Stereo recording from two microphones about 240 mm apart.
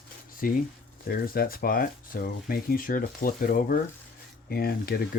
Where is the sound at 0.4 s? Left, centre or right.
Left.